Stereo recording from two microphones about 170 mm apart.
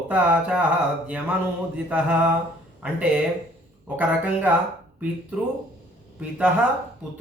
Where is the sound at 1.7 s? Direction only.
10° right (ahead or behind).